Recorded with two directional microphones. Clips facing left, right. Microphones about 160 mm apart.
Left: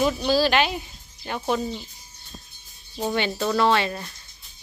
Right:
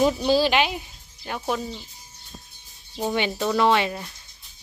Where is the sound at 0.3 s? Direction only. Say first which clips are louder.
Even; 20° right (ahead or behind); by 1.8 s centre (ahead or behind).